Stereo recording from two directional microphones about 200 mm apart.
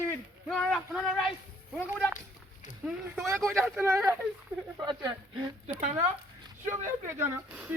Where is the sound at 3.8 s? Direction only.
10° right (ahead or behind).